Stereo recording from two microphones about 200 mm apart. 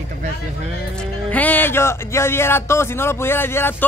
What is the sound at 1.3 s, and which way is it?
Speech, 10° left (ahead or behind).